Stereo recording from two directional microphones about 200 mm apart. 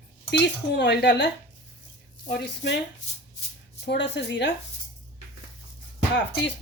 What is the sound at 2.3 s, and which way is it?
Speech, 60° left (ahead or behind).